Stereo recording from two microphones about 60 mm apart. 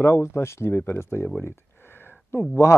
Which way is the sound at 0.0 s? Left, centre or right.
Left.